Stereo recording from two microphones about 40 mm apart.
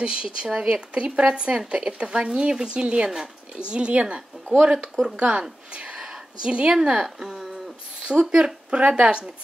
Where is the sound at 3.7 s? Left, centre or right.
Right.